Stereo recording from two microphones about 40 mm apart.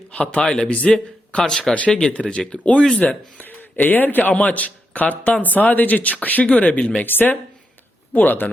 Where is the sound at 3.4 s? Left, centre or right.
Left.